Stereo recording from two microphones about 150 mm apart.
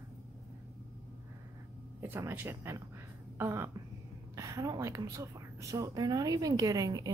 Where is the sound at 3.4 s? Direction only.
15° right (ahead or behind).